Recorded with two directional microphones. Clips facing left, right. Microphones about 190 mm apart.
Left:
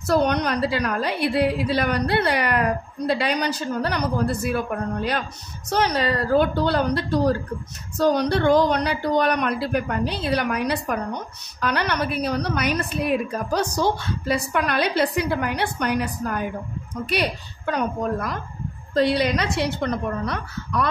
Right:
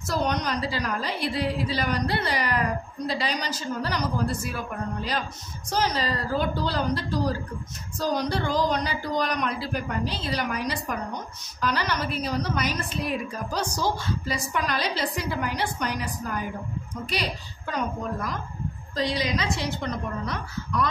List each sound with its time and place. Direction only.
0.0 s a woman's voice: 60° left (ahead or behind)